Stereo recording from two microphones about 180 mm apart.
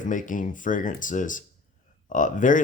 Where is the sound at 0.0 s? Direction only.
45° left (ahead or behind).